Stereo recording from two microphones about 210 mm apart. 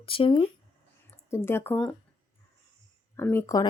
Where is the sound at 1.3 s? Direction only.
10° left (ahead or behind).